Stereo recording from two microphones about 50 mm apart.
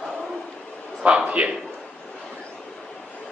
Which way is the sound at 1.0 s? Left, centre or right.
Right.